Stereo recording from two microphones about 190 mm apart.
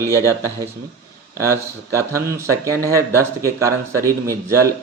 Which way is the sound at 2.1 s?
15° right (ahead or behind).